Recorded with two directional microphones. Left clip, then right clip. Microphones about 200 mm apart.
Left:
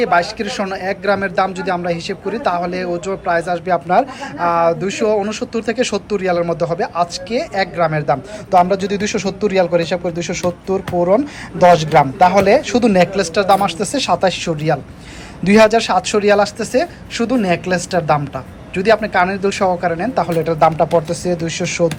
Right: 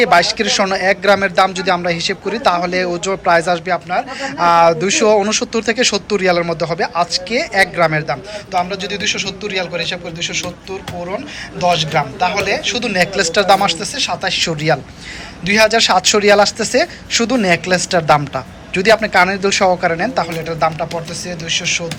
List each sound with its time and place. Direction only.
0.0 s speech: centre (ahead or behind)
3.8 s speech: 10° left (ahead or behind)
4.4 s speech: centre (ahead or behind)
8.0 s a man's voice: 15° left (ahead or behind)
13.0 s speech: 5° left (ahead or behind); by 21.8 s 25° left (ahead or behind)